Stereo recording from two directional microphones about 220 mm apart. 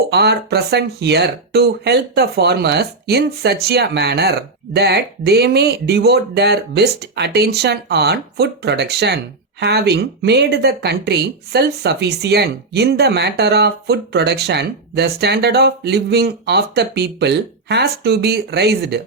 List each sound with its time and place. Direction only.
0.1 s speech: 45° right (ahead or behind)